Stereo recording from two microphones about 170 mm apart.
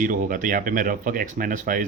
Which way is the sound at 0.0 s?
50° right (ahead or behind).